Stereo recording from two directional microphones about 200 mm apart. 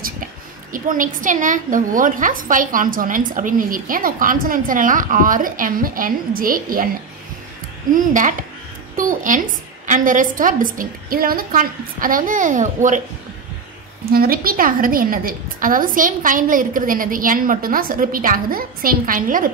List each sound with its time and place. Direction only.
0.7 s a woman's voice: 40° right (ahead or behind)
7.9 s a woman's voice: 40° right (ahead or behind)
14.0 s a woman's voice: 50° right (ahead or behind)